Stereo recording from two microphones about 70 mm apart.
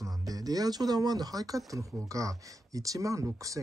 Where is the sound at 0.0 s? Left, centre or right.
Right.